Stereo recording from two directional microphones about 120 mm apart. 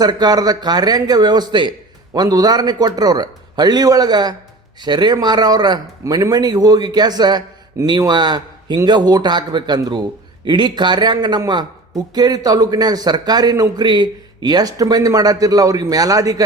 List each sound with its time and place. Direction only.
0.0 s speech: 35° right (ahead or behind)